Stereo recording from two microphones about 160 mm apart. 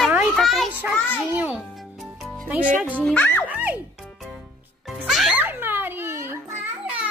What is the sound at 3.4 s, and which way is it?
Speech, 10° right (ahead or behind).